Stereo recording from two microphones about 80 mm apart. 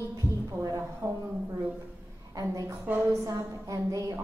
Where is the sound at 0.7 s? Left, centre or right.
Right.